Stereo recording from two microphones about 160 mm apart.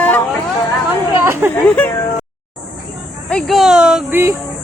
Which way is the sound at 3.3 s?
Centre (ahead or behind).